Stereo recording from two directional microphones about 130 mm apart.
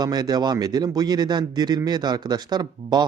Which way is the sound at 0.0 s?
30° right (ahead or behind).